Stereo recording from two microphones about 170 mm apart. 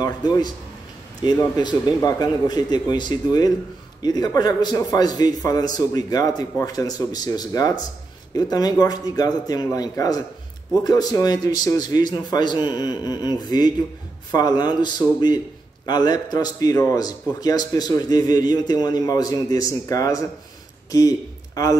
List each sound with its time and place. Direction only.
0.0 s a man's voice: 25° left (ahead or behind)